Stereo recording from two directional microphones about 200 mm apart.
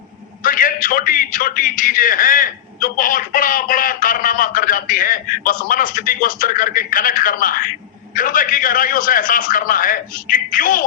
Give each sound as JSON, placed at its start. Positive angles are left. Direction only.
{"t": 0.4, "sound": "a man's voice", "side_deg": 45}